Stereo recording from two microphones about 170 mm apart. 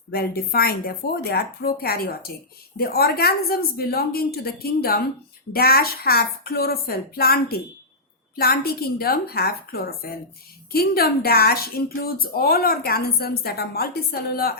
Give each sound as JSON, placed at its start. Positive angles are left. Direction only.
{"t": 0.1, "sound": "speech", "side_deg": 65}